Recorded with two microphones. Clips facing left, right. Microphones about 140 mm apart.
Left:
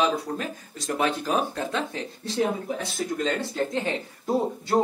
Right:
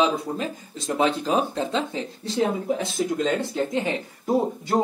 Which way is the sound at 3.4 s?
15° right (ahead or behind).